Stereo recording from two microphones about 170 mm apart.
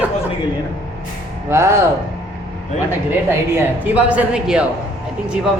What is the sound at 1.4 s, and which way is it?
Speech, 15° right (ahead or behind).